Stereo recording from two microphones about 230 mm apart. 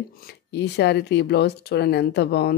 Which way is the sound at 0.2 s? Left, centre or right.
Left.